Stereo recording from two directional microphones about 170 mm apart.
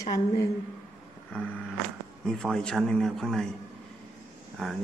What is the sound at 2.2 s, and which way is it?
A man's voice, 5° left (ahead or behind).